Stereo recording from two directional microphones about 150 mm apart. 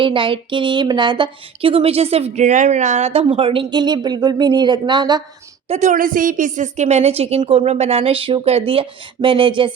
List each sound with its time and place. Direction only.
0.0 s speech: 35° right (ahead or behind)
5.6 s a woman's voice: 50° right (ahead or behind); by 9.7 s 35° right (ahead or behind)